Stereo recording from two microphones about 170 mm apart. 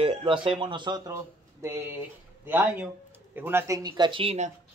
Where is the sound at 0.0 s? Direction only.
35° right (ahead or behind).